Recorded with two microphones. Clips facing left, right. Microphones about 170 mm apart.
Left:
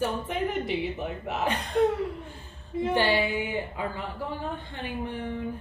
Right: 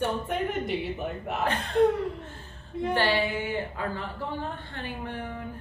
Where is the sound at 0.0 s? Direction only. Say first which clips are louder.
Even; centre (ahead or behind).